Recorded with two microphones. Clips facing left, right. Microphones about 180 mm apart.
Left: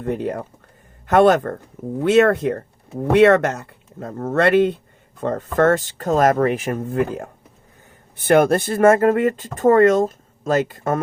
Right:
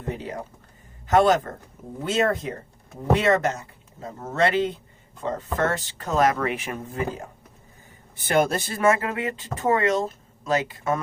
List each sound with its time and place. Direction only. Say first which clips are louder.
0.1 s speech: left 8 dB; 55° left (ahead or behind)